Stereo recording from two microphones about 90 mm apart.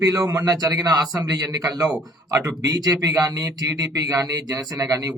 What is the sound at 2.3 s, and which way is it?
Speech, 40° right (ahead or behind).